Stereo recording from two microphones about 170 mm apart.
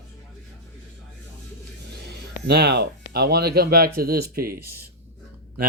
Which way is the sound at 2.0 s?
70° right (ahead or behind).